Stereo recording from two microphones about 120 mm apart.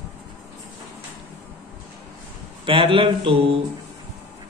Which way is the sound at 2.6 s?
50° right (ahead or behind).